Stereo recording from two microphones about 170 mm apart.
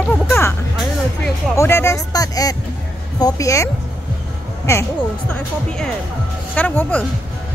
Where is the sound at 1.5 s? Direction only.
15° left (ahead or behind).